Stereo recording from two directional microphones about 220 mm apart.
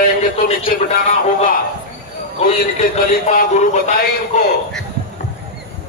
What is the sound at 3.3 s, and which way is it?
Speech, 35° left (ahead or behind).